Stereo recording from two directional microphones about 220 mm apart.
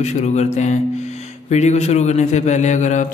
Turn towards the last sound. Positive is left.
turn(degrees=35)  # may be behind; listen again after turning